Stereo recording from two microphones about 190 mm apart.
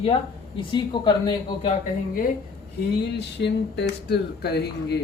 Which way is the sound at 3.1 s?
65° left (ahead or behind).